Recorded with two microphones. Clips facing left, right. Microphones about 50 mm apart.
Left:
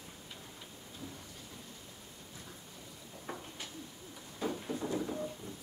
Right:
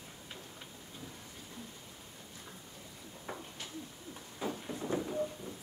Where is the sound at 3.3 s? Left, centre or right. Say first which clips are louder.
Even; centre.